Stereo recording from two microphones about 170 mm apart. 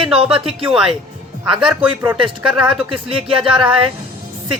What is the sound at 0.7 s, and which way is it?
Speech, centre (ahead or behind).